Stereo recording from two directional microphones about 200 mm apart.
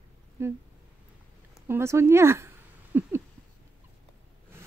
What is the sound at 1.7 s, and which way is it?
Speech, 15° right (ahead or behind).